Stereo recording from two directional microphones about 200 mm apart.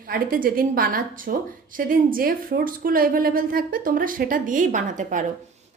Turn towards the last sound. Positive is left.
turn(degrees=-40)  # may be behind; listen again after turning